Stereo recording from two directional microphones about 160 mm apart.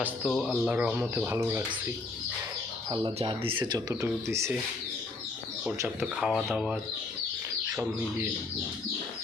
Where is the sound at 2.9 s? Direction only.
30° right (ahead or behind).